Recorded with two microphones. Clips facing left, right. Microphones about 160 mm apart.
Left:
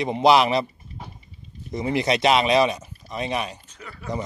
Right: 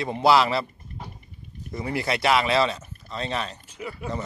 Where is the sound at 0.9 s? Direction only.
60° right (ahead or behind).